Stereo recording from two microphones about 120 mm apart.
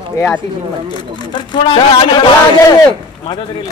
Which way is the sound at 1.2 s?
40° left (ahead or behind).